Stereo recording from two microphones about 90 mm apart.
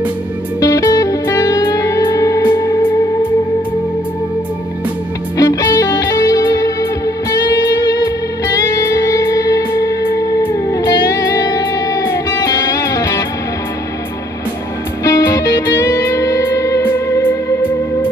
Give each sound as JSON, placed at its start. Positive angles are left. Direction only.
{"t": 0.6, "sound": "music", "side_deg": 45}
{"t": 5.4, "sound": "music", "side_deg": 45}
{"t": 10.8, "sound": "music", "side_deg": 50}
{"t": 15.0, "sound": "music", "side_deg": 50}
{"t": 16.8, "sound": "music", "side_deg": 25}